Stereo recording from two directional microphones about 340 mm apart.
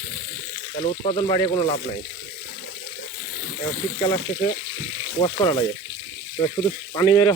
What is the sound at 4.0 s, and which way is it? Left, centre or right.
Speech, centre.